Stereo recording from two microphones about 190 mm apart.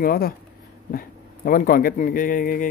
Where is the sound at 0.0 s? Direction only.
50° left (ahead or behind).